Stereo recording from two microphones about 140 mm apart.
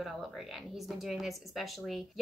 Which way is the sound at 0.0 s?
Centre (ahead or behind).